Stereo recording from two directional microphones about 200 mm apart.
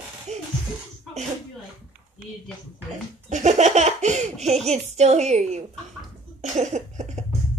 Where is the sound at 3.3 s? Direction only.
35° right (ahead or behind).